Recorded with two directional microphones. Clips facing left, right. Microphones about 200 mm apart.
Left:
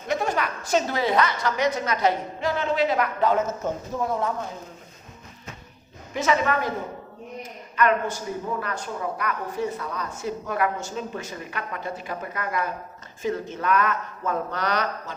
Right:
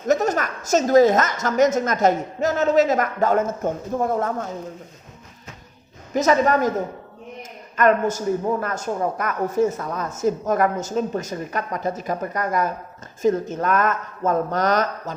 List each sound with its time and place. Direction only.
0.1 s a woman's voice: 45° right (ahead or behind)
6.1 s a woman's voice: 40° right (ahead or behind)
7.8 s a woman's voice: 45° right (ahead or behind)